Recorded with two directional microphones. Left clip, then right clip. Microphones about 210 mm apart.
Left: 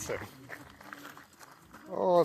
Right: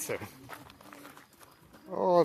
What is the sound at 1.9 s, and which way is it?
Speech, 20° right (ahead or behind).